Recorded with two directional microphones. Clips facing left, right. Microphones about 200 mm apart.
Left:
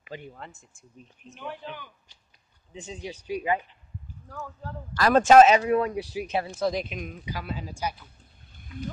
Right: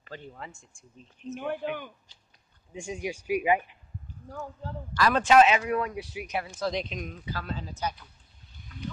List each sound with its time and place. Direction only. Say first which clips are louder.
0.0 s speech: left 3 dB; 15° left (ahead or behind)
0.3 s speech: even; centre (ahead or behind)
1.4 s speech: right 5 dB; 55° right (ahead or behind)
2.7 s speech: right 4 dB; 10° right (ahead or behind)
4.3 s speech: right 1 dB; 25° right (ahead or behind)
4.9 s speech: left 4 dB; 45° left (ahead or behind)
6.7 s speech: left 1 dB; 5° left (ahead or behind)